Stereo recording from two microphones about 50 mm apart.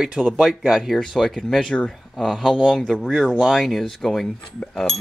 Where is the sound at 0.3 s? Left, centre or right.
Centre.